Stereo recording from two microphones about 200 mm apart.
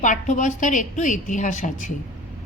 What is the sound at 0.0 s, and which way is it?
A woman's voice, 40° left (ahead or behind).